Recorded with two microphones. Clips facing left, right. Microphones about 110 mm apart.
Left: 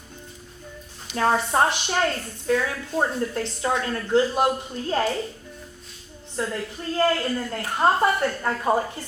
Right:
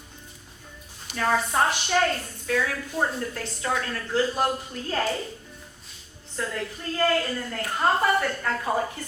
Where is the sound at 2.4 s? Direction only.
25° left (ahead or behind).